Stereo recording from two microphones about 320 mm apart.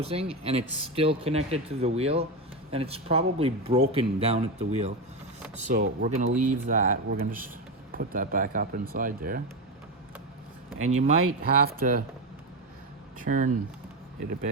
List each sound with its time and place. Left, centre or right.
0.0 s speech: centre
10.8 s speech: right
13.2 s speech: right